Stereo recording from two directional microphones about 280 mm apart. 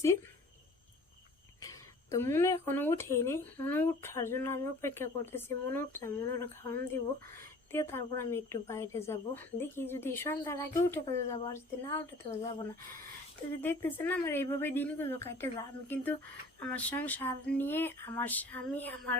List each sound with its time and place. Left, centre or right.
1.6 s a sound: centre
2.7 s a woman's voice: centre
13.6 s a woman's voice: centre
16.6 s a woman's voice: centre